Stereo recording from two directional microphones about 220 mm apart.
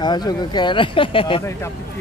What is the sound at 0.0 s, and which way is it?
Speech, 20° left (ahead or behind).